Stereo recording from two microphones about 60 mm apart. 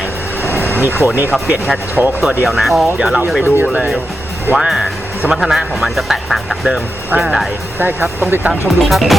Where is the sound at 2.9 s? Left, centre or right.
Centre.